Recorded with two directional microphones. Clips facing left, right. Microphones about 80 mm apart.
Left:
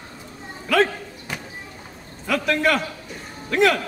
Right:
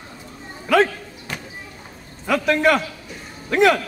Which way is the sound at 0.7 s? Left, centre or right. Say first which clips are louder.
Right 2 dB; centre.